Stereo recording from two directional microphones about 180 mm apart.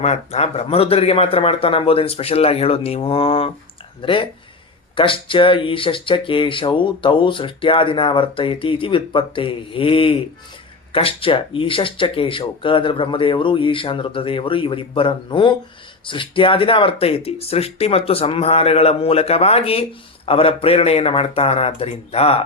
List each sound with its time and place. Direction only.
0.0 s speech: 35° left (ahead or behind)